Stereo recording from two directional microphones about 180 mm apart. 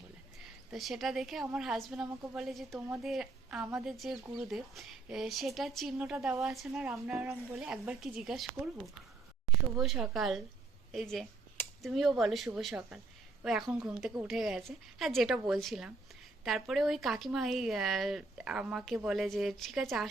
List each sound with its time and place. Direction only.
0.3 s a woman's voice: centre (ahead or behind)
9.7 s speech: centre (ahead or behind)